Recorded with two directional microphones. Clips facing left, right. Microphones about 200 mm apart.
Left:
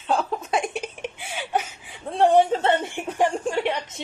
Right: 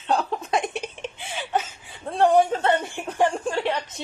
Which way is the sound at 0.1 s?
Centre (ahead or behind).